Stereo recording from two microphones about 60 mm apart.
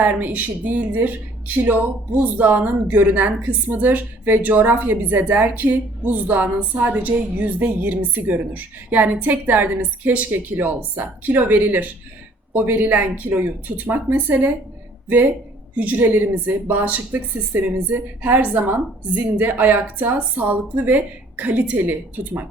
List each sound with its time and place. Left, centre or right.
0.0 s a woman's voice: right
15.7 s a woman's voice: right